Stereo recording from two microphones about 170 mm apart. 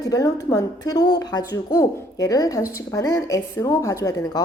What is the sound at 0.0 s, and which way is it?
A woman's voice, 20° left (ahead or behind).